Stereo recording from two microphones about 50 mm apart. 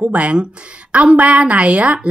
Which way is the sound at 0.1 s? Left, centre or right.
Right.